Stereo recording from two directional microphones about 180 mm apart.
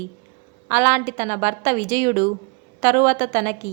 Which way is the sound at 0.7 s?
10° right (ahead or behind).